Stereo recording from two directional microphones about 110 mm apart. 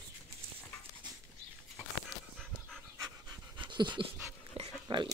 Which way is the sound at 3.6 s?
45° right (ahead or behind).